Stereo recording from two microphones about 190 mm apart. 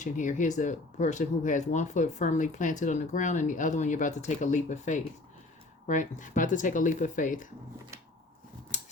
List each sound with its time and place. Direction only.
0.0 s speech: 40° left (ahead or behind)